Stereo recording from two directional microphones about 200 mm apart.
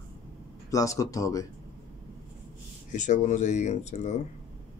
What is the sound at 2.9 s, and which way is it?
Speech, 35° left (ahead or behind).